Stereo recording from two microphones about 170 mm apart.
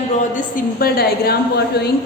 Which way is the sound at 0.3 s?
60° left (ahead or behind).